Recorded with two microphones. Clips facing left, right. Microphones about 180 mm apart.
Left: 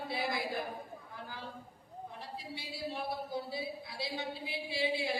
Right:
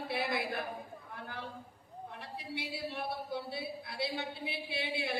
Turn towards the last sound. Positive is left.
turn(degrees=-65)  # may be behind; listen again after turning